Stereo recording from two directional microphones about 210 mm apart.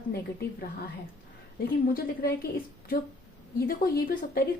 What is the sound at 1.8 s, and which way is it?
Speech, 45° left (ahead or behind).